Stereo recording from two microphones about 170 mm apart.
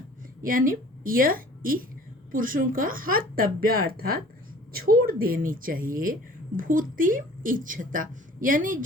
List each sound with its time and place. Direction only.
0.4 s a woman's voice: 55° right (ahead or behind)